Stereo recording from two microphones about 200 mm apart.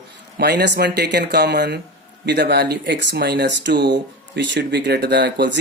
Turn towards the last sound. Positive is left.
turn(degrees=-60)  # may be behind; listen again after turning